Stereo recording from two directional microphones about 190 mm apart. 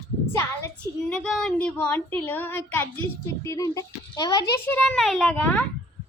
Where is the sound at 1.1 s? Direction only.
Centre (ahead or behind); by 4.4 s 20° left (ahead or behind).